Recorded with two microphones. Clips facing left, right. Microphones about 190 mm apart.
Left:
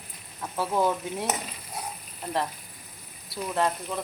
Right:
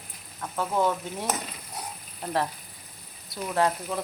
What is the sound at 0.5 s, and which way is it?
Stir, 10° left (ahead or behind).